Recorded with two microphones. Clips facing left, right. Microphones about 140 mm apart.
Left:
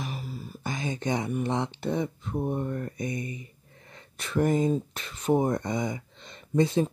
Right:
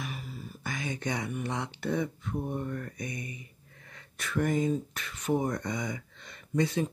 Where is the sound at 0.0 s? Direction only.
35° left (ahead or behind).